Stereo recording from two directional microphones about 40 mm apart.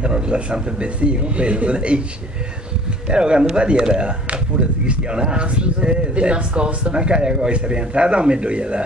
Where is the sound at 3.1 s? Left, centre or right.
Right.